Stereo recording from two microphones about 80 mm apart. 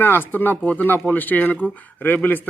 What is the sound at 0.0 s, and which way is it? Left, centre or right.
Speech, left.